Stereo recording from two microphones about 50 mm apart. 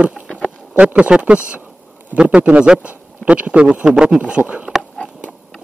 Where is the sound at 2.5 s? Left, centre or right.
Right.